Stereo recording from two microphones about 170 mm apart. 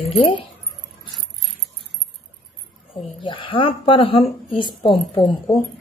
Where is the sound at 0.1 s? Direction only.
35° left (ahead or behind).